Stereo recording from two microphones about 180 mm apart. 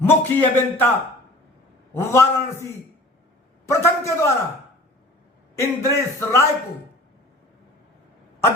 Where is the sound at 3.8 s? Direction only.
15° left (ahead or behind).